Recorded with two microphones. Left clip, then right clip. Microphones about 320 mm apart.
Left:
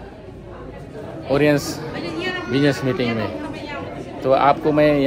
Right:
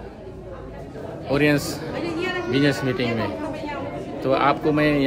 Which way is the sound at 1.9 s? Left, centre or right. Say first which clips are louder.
Even; right.